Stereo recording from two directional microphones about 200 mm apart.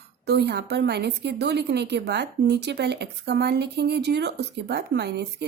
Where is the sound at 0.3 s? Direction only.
55° right (ahead or behind).